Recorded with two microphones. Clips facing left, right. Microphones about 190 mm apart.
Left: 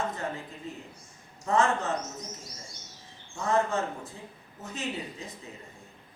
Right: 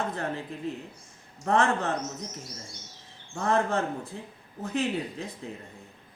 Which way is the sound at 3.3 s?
60° right (ahead or behind).